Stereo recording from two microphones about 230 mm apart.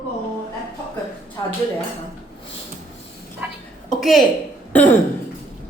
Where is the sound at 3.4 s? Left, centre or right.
Centre.